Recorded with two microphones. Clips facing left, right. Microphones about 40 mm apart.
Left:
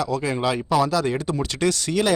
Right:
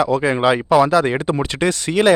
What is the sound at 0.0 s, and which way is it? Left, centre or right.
Speech, right.